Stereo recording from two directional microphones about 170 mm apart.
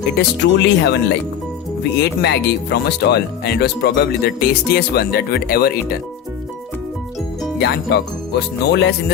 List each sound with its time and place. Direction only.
0.2 s speech: 90° left
2.0 s speech: 75° left (ahead or behind)
7.9 s speech: 75° left (ahead or behind)